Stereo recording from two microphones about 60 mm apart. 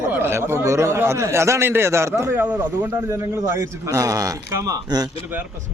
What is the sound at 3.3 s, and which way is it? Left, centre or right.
A man's voice, right.